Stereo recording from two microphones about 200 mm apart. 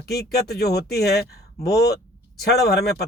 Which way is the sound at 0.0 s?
50° left (ahead or behind).